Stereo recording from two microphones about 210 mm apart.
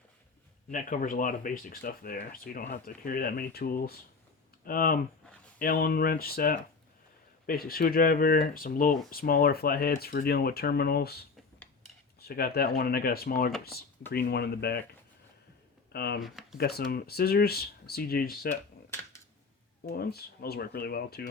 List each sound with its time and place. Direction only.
0.7 s speech: 40° left (ahead or behind)
15.9 s speech: 50° left (ahead or behind)
16.2 s speech: centre (ahead or behind)
16.6 s speech: 50° left (ahead or behind)
19.9 s speech: 50° left (ahead or behind)